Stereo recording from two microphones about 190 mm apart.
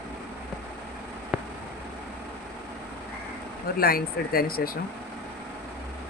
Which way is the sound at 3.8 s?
50° left (ahead or behind).